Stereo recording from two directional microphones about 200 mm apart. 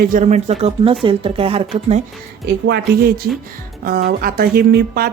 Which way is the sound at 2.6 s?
55° right (ahead or behind).